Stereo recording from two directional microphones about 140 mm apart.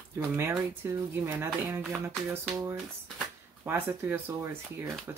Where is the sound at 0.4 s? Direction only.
15° right (ahead or behind).